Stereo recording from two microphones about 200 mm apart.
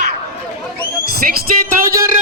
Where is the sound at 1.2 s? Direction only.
45° right (ahead or behind).